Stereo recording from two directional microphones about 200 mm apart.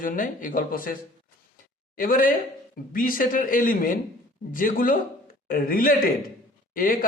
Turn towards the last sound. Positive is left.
turn(degrees=45)  # may be behind; listen again after turning